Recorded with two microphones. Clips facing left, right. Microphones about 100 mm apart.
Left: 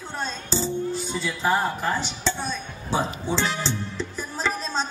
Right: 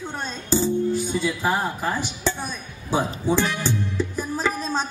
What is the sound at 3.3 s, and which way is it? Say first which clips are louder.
Speech: right 6 dB; 15° right (ahead or behind).